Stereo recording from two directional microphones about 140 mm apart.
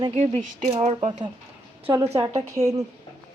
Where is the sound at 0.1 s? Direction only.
55° right (ahead or behind).